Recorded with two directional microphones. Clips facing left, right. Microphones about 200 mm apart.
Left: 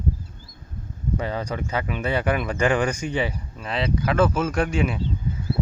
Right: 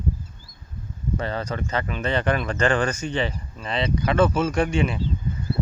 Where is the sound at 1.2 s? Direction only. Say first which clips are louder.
Even; 10° left (ahead or behind).